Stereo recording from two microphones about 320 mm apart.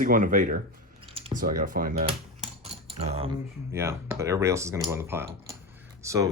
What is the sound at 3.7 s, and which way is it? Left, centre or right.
Speech, centre.